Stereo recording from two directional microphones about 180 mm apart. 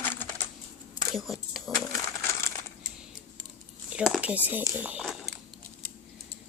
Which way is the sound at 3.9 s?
5° right (ahead or behind).